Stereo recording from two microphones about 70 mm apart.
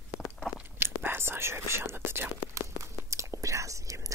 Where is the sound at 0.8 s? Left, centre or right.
Right.